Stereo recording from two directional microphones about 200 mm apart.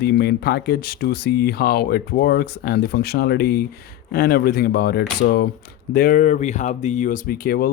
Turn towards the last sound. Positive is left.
turn(degrees=50)  # may be behind; listen again after turning